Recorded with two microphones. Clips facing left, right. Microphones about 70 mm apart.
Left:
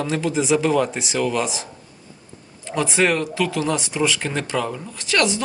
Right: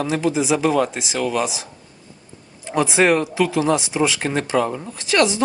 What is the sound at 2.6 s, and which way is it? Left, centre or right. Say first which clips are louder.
Speech: right 3 dB; right.